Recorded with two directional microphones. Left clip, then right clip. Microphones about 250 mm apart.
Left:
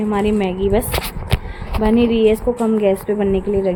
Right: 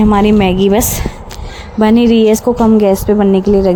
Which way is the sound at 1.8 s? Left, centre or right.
Right.